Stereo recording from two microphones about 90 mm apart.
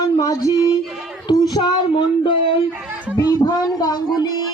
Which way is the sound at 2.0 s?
75° left (ahead or behind).